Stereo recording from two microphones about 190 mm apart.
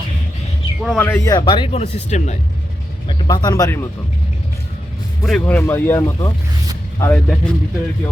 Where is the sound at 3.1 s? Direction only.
20° left (ahead or behind).